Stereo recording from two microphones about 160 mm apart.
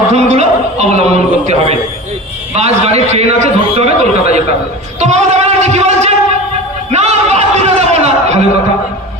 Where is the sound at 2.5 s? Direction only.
40° right (ahead or behind).